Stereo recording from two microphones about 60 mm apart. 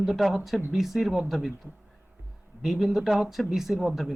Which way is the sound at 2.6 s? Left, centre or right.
Centre.